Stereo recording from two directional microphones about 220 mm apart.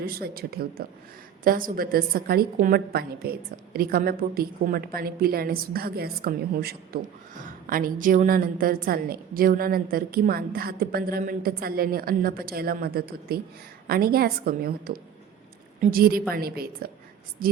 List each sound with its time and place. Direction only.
0.0 s a woman's voice: 45° right (ahead or behind)